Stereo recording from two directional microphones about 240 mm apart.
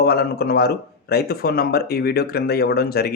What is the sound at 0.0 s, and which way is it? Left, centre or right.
Speech, left.